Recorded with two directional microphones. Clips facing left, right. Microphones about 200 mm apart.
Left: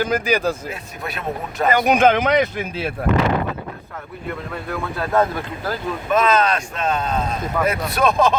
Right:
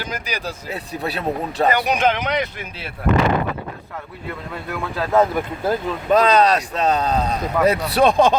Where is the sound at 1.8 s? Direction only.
50° left (ahead or behind).